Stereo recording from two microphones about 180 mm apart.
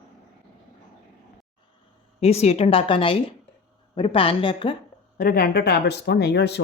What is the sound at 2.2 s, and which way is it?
A woman's voice, 35° left (ahead or behind).